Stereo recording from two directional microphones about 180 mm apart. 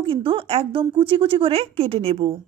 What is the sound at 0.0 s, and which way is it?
A woman's voice, 30° right (ahead or behind).